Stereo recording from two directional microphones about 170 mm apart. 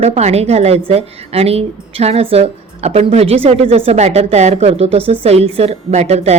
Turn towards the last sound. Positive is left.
turn(degrees=-40)  # may be behind; listen again after turning